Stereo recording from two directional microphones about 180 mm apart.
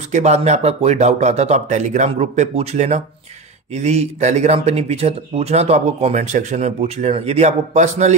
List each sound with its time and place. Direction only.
0.1 s speech: 40° right (ahead or behind)